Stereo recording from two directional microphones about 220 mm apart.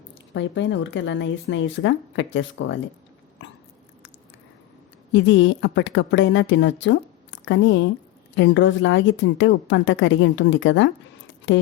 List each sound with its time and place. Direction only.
0.1 s a woman's voice: 55° left (ahead or behind)
5.1 s a woman's voice: 60° left (ahead or behind)